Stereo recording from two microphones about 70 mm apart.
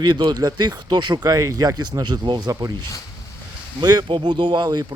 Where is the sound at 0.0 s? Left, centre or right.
Right.